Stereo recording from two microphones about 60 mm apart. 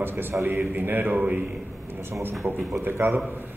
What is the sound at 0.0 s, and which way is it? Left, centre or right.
Speech, right.